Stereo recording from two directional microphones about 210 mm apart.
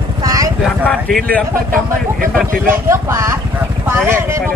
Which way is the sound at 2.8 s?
15° right (ahead or behind).